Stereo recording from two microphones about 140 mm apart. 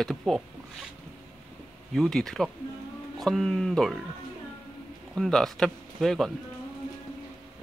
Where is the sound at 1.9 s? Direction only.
5° left (ahead or behind).